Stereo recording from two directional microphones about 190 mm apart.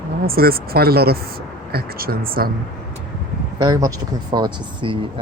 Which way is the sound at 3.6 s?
20° right (ahead or behind).